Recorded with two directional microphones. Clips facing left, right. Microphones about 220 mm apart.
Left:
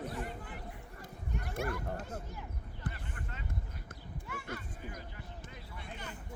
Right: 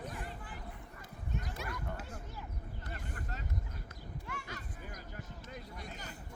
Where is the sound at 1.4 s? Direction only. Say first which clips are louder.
Left 7 dB; 50° left (ahead or behind).